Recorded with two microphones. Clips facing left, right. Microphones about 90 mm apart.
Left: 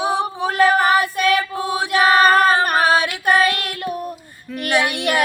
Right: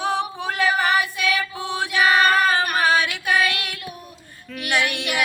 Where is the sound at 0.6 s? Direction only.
45° left (ahead or behind).